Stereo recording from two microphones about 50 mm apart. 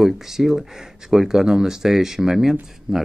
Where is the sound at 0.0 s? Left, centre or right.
Centre.